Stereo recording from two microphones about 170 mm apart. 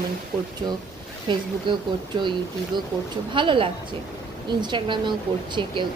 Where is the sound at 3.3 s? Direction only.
30° right (ahead or behind).